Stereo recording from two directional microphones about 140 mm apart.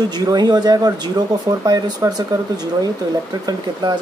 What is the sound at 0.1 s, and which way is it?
Speech, 30° right (ahead or behind).